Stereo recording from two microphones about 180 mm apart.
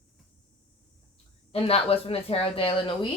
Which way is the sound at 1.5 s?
35° left (ahead or behind).